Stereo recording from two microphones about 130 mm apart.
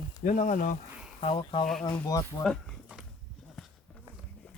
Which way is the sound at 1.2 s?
45° left (ahead or behind).